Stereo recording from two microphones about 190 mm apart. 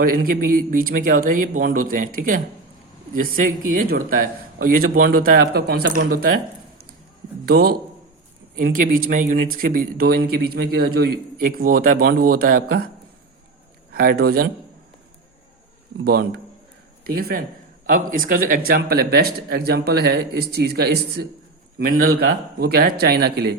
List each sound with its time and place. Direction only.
0.0 s speech: 50° right (ahead or behind)
7.4 s a man's voice: 55° right (ahead or behind)
13.9 s speech: 50° right (ahead or behind)
17.2 s speech: 50° right (ahead or behind)